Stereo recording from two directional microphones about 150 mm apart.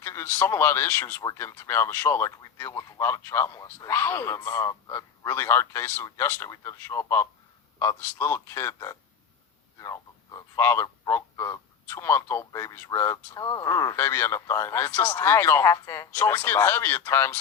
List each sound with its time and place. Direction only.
0.0 s speech: 15° left (ahead or behind)